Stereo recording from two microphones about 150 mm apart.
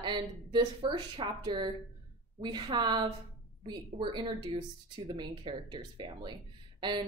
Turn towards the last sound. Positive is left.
turn(degrees=-30)  # may be behind; listen again after turning